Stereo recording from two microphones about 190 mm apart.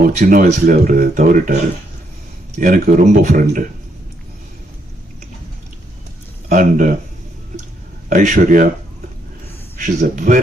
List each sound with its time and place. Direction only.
0.2 s speech: 45° right (ahead or behind)
2.6 s speech: 50° right (ahead or behind)
6.5 s speech: 45° right (ahead or behind)
8.1 s speech: 40° right (ahead or behind)
9.7 s speech: 40° right (ahead or behind)